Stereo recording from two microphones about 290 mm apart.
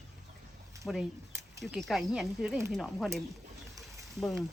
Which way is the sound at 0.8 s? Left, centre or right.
Centre.